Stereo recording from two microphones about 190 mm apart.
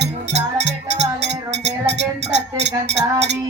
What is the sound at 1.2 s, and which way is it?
Music, 65° right (ahead or behind).